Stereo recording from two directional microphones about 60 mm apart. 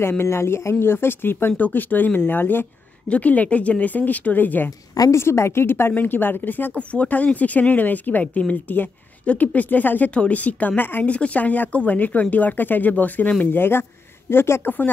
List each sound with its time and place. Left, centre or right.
0.2 s a woman's voice: left
5.1 s a woman's voice: left